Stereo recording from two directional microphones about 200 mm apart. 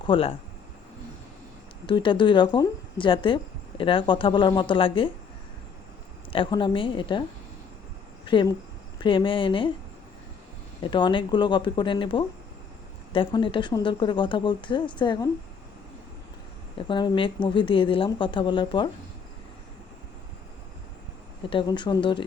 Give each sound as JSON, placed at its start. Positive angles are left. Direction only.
{"t": 0.0, "sound": "speech", "side_deg": 25}
{"t": 1.9, "sound": "speech", "side_deg": 25}
{"t": 6.3, "sound": "speech", "side_deg": 25}
{"t": 10.9, "sound": "speech", "side_deg": 25}
{"t": 16.7, "sound": "speech", "side_deg": 25}
{"t": 21.5, "sound": "speech", "side_deg": 25}